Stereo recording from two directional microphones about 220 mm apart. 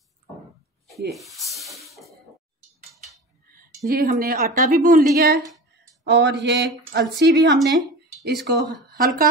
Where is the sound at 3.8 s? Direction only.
40° right (ahead or behind).